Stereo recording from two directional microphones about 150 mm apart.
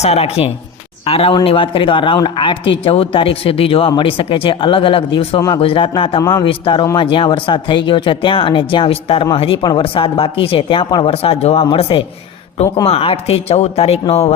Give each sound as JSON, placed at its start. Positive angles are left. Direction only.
{"t": 0.0, "sound": "speech", "side_deg": 45}